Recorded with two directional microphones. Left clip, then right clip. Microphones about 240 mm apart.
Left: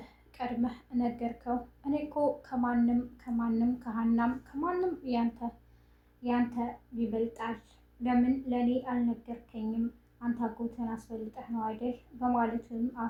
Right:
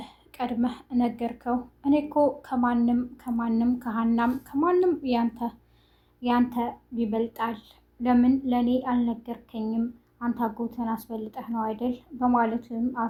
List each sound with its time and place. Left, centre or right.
0.0 s a woman's voice: right